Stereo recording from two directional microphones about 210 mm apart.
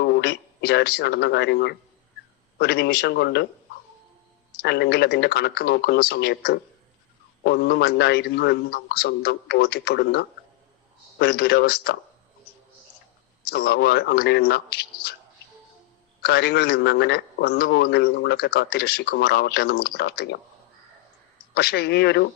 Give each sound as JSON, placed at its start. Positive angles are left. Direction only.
{"t": 0.0, "sound": "a man's voice", "side_deg": 50}
{"t": 4.6, "sound": "a man's voice", "side_deg": 55}
{"t": 13.4, "sound": "a man's voice", "side_deg": 50}
{"t": 16.2, "sound": "a man's voice", "side_deg": 50}
{"t": 21.5, "sound": "a man's voice", "side_deg": 50}